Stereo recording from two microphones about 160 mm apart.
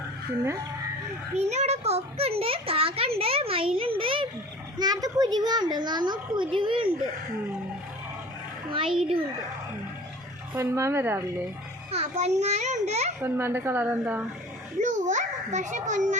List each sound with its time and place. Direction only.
1.4 s a child's voice: 45° right (ahead or behind)
10.5 s a woman's voice: 15° right (ahead or behind)
11.9 s a child's voice: 40° right (ahead or behind)
13.2 s a woman's voice: 15° right (ahead or behind)
14.8 s a child's voice: 50° right (ahead or behind)